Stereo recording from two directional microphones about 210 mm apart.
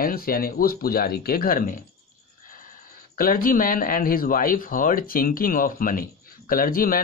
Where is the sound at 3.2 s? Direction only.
45° left (ahead or behind).